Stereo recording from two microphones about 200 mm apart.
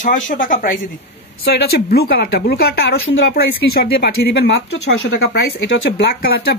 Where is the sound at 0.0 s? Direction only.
40° left (ahead or behind).